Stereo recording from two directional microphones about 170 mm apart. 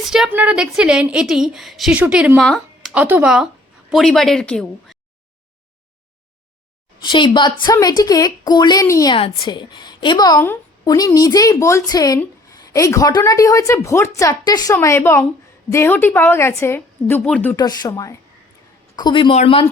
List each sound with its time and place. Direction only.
0.0 s a woman's voice: 5° right (ahead or behind)
2.4 s a sound: 5° left (ahead or behind)
2.9 s speech: 10° right (ahead or behind)
7.0 s a woman's voice: 25° left (ahead or behind)
9.1 s a woman's voice: 30° left (ahead or behind); by 17.6 s 10° left (ahead or behind)
17.6 s a woman's voice: 20° left (ahead or behind)